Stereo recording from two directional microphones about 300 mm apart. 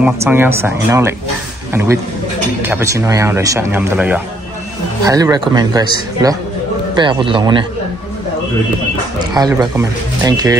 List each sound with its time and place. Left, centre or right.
0.0 s a man's voice: centre
9.3 s speech: centre